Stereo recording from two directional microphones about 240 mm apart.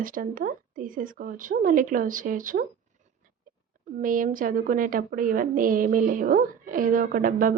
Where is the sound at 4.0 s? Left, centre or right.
Right.